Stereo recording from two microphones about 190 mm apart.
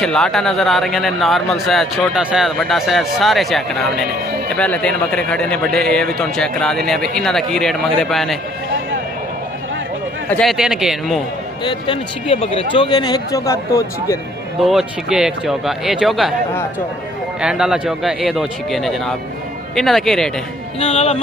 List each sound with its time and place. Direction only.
0.0 s a man's voice: centre (ahead or behind)
10.3 s a man's voice: centre (ahead or behind)
11.6 s speech: 25° left (ahead or behind)
14.7 s a man's voice: 5° right (ahead or behind)
17.4 s a man's voice: 5° right (ahead or behind)
20.8 s speech: 35° left (ahead or behind)